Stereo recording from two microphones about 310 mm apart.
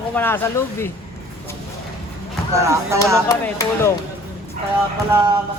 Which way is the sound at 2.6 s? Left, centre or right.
Centre.